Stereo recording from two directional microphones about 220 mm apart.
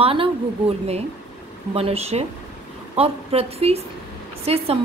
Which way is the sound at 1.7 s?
25° right (ahead or behind).